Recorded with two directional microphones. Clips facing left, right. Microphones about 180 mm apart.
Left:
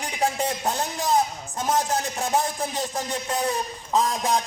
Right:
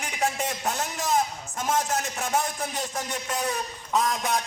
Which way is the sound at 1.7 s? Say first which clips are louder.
Left 2 dB; 30° left (ahead or behind).